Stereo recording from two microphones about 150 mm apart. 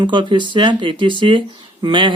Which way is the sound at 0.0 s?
30° right (ahead or behind).